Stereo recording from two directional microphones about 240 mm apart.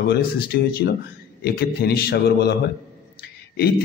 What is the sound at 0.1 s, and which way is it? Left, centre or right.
A man's voice, left.